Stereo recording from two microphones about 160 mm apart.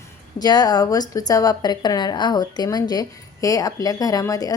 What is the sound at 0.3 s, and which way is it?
A woman's voice, 25° left (ahead or behind).